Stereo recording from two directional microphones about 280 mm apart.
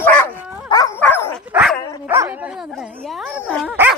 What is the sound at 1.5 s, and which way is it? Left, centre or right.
Dog, centre.